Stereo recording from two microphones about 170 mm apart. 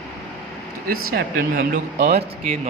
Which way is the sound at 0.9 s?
55° right (ahead or behind).